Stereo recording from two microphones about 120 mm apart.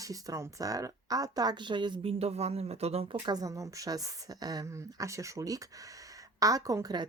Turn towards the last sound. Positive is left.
turn(degrees=-35)  # may be behind; listen again after turning